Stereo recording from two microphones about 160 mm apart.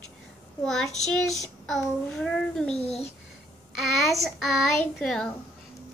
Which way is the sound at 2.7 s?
40° left (ahead or behind).